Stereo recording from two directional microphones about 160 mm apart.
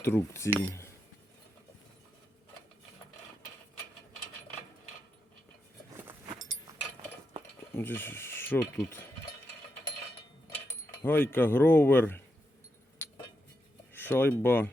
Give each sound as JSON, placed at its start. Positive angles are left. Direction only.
{"t": 0.0, "sound": "speech", "side_deg": 15}
{"t": 7.7, "sound": "mechanisms", "side_deg": 15}
{"t": 11.0, "sound": "speech", "side_deg": 10}
{"t": 13.9, "sound": "speech", "side_deg": 10}